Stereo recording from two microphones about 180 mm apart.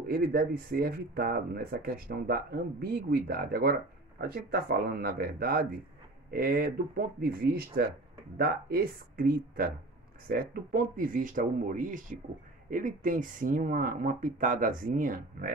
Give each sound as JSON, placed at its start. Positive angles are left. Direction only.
{"t": 0.1, "sound": "speech", "side_deg": -55}